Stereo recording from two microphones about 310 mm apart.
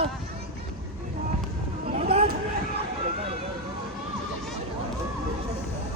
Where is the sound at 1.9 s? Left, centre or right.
Right.